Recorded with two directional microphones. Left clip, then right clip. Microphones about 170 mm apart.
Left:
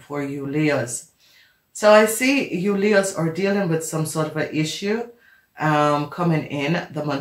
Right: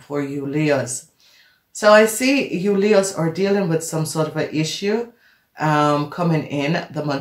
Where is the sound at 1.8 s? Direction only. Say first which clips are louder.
Right 1 dB; 35° right (ahead or behind).